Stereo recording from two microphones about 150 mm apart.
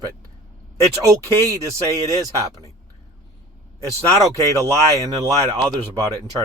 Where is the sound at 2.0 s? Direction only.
20° right (ahead or behind).